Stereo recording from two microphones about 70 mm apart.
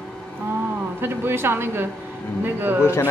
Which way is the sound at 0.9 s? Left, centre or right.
Right.